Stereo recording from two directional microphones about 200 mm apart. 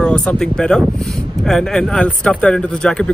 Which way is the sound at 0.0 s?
5° left (ahead or behind).